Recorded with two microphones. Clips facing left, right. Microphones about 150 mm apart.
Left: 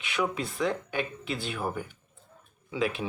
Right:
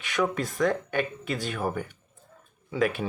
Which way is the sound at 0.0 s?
45° right (ahead or behind).